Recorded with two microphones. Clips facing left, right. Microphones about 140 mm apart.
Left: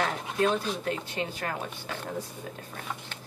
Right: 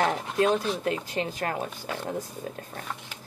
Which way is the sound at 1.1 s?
40° right (ahead or behind).